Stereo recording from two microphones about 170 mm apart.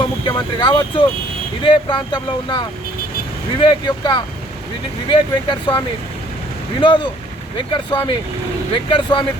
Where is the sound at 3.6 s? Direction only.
25° left (ahead or behind).